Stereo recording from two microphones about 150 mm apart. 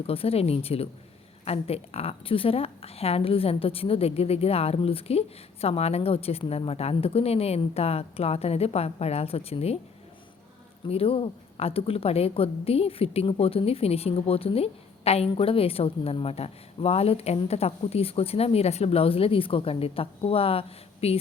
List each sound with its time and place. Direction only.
0.1 s a woman's voice: 40° left (ahead or behind)
10.8 s a woman's voice: 40° left (ahead or behind)